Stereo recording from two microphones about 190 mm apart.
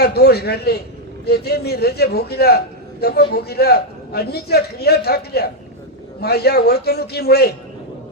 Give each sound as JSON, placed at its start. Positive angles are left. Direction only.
{"t": 0.0, "sound": "a man's voice", "side_deg": 55}